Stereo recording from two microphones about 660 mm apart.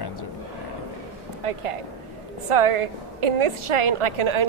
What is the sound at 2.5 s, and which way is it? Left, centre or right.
A woman's voice, right.